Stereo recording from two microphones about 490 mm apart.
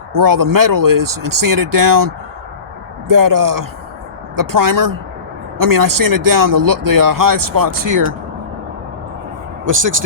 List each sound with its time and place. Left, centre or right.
0.1 s speech: right